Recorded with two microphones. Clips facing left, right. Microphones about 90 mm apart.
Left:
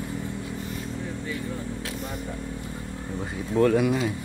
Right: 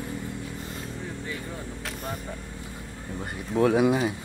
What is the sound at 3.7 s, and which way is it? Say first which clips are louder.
Speech: right 1 dB; 20° right (ahead or behind).